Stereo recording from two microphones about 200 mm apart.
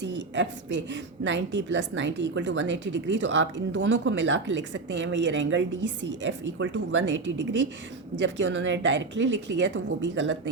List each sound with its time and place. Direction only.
0.0 s a woman's voice: 65° right (ahead or behind)